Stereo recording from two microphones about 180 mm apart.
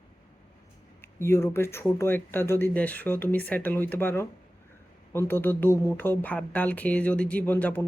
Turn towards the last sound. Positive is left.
turn(degrees=10)  # may be behind; listen again after turning